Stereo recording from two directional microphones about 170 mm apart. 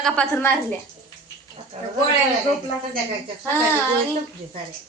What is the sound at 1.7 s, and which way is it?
Speech, 40° right (ahead or behind).